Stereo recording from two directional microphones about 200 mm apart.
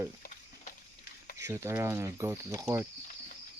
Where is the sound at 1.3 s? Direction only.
15° right (ahead or behind).